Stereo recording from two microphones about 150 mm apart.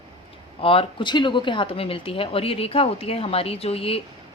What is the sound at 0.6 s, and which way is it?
Speech, 40° left (ahead or behind).